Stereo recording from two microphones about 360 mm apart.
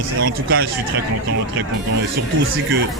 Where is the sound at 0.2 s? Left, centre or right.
Right.